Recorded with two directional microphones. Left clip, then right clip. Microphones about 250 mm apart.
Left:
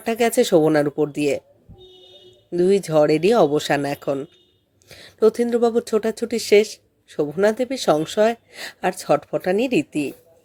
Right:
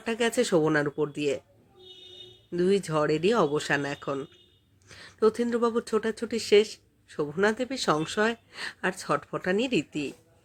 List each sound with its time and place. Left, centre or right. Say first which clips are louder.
0.0 s speech: left 8 dB; centre
2.5 s speech: left 8 dB; centre